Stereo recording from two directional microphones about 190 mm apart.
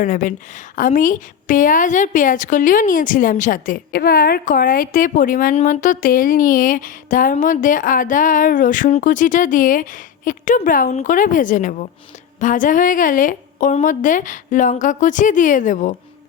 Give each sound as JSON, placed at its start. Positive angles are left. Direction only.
{"t": 0.0, "sound": "a woman's voice", "side_deg": 45}